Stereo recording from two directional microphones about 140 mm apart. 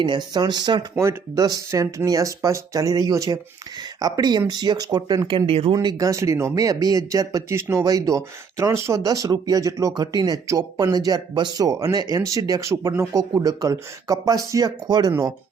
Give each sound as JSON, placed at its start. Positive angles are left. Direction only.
{"t": 0.3, "sound": "speech", "side_deg": -30}
{"t": 5.7, "sound": "speech", "side_deg": -30}